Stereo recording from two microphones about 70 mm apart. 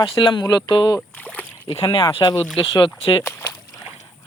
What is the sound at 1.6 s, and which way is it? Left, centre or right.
Speech, left.